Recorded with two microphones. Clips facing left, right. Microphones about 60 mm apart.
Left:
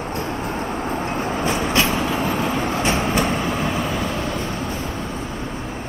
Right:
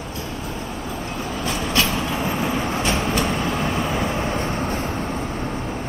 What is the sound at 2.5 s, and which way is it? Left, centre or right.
Vehicle, left.